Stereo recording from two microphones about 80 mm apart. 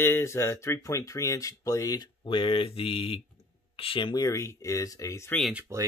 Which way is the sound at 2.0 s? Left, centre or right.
Left.